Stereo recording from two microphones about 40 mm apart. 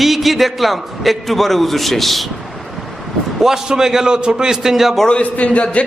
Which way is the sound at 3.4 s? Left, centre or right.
Centre.